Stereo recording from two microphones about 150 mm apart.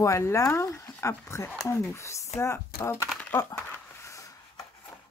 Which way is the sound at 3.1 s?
10° left (ahead or behind).